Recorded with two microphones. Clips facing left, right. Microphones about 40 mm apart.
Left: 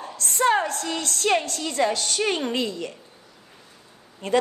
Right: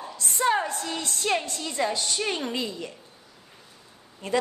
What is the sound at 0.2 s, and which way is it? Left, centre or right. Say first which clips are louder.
A woman's voice: left 3 dB; left.